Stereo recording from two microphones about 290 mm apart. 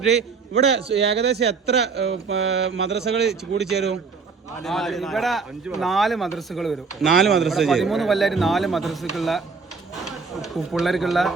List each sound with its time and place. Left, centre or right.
0.5 s a man's voice: centre
0.9 s speech: right
4.6 s a man's voice: centre